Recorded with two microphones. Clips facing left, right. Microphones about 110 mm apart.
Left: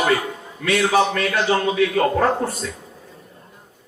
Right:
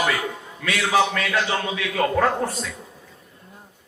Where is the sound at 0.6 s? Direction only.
40° left (ahead or behind).